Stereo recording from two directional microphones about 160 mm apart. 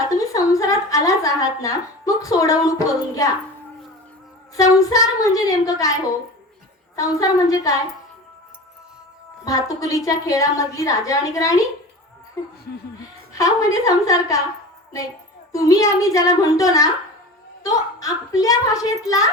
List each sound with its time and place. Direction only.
0.3 s a sound: 20° left (ahead or behind)
4.5 s a woman's voice: 20° left (ahead or behind)
6.9 s a woman's voice: 20° left (ahead or behind)
9.4 s a woman's voice: 20° left (ahead or behind)
15.5 s a woman's voice: 20° left (ahead or behind)